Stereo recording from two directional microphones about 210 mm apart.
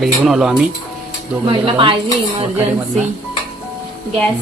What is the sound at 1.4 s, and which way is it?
Speech, 25° right (ahead or behind).